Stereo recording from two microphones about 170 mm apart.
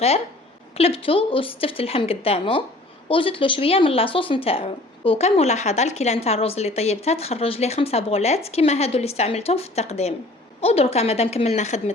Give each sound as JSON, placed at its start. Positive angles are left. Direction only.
{"t": 0.8, "sound": "speech", "side_deg": 35}